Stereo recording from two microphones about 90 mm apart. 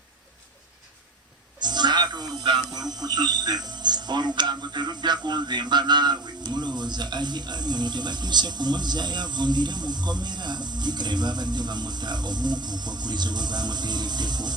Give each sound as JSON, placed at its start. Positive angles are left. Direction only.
{"t": 1.5, "sound": "speech", "side_deg": -55}